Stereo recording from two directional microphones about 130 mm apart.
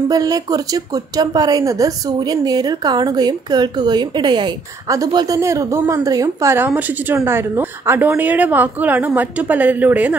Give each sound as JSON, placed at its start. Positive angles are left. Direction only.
{"t": 0.1, "sound": "a woman's voice", "side_deg": -30}